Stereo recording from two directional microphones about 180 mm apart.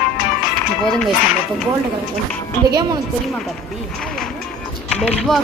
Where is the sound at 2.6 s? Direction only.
20° right (ahead or behind).